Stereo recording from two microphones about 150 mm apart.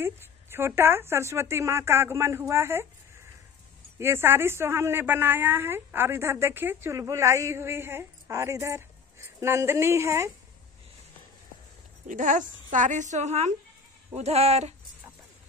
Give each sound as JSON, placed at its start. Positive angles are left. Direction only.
{"t": 0.0, "sound": "a woman's voice", "side_deg": -15}
{"t": 4.0, "sound": "a woman's voice", "side_deg": -15}
{"t": 12.1, "sound": "a woman's voice", "side_deg": -60}